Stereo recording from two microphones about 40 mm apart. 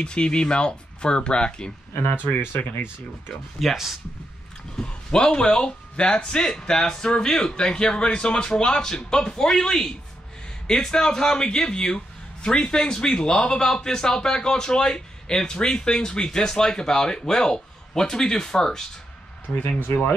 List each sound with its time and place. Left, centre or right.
0.0 s a man's voice: left
2.7 s speech: left
3.5 s speech: centre
4.7 s a man's voice: left
19.9 s speech: left